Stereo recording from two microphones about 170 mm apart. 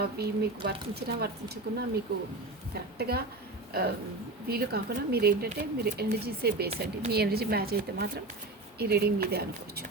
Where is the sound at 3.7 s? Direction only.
65° right (ahead or behind).